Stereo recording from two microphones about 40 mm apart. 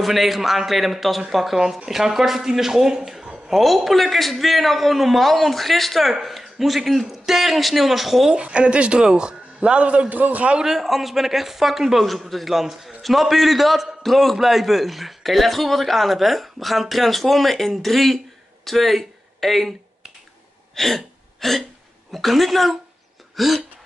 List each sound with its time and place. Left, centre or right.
0.0 s a man's voice: centre
3.5 s a man's voice: centre
8.3 s speech: right
10.1 s a man's voice: right
10.6 s a man's voice: centre
20.7 s a sound: centre
22.1 s a man's voice: centre
23.3 s throat clearing: centre